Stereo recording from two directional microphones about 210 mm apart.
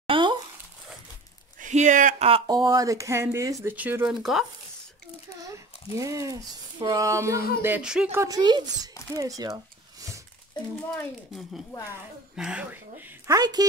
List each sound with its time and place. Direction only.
0.0 s a sound: 25° right (ahead or behind)
1.6 s speech: 35° right (ahead or behind); by 4.5 s centre (ahead or behind)
5.4 s speech: 15° right (ahead or behind)
10.9 s speech: centre (ahead or behind)
13.3 s speech: 20° right (ahead or behind)